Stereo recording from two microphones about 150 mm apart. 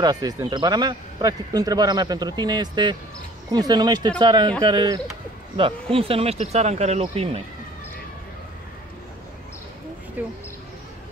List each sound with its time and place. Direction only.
0.0 s speech: 25° right (ahead or behind); by 7.4 s 40° right (ahead or behind)
10.2 s speech: 10° right (ahead or behind)